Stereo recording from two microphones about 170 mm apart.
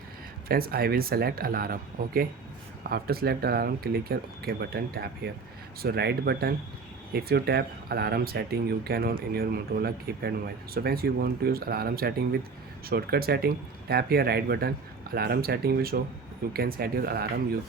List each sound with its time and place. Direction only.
0.4 s speech: 60° right (ahead or behind)